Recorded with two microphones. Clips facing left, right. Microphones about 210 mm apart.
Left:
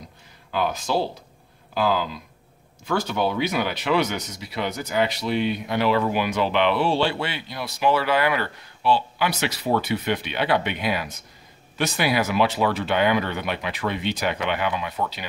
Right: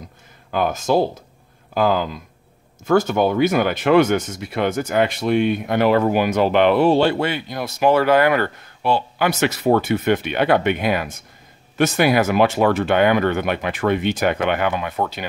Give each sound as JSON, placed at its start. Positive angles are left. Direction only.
{"t": 0.5, "sound": "speech", "side_deg": -50}